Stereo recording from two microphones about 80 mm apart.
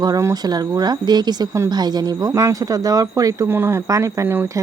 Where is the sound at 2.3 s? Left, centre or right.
Right.